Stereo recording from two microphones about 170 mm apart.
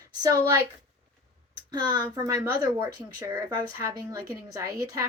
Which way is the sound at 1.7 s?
25° right (ahead or behind).